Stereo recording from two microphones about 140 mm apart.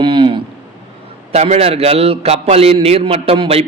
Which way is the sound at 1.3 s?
50° right (ahead or behind).